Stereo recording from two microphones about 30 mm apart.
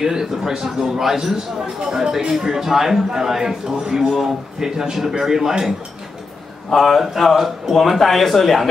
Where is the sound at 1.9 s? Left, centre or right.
Centre.